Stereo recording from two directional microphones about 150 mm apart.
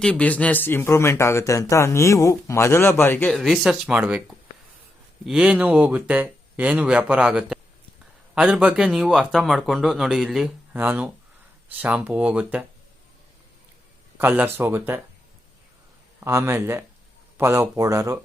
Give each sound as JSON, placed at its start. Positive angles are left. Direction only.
{"t": 0.0, "sound": "speech", "side_deg": 5}
{"t": 3.3, "sound": "speech", "side_deg": 0}
{"t": 5.2, "sound": "speech", "side_deg": -5}
{"t": 14.2, "sound": "speech", "side_deg": -15}
{"t": 16.2, "sound": "speech", "side_deg": -20}